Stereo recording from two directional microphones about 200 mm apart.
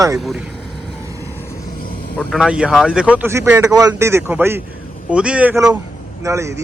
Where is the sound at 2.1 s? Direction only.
Centre (ahead or behind).